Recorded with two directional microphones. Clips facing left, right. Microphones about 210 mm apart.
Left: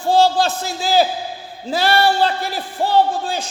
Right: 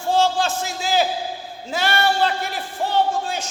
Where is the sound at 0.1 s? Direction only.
35° left (ahead or behind).